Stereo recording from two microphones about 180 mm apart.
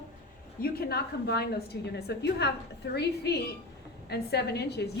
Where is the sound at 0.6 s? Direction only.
60° left (ahead or behind).